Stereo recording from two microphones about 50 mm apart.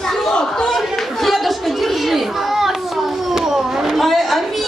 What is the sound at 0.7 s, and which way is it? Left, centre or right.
Chatter, centre.